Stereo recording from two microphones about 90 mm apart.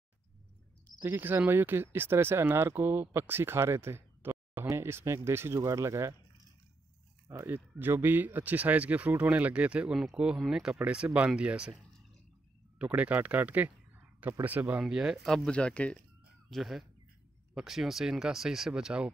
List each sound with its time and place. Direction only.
1.0 s speech: 25° right (ahead or behind)
7.4 s speech: 25° right (ahead or behind)
14.8 s speech: 5° right (ahead or behind); by 16.0 s 15° left (ahead or behind)
16.4 s speech: centre (ahead or behind)